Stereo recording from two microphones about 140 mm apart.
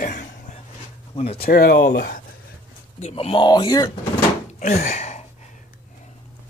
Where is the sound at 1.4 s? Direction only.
90° left.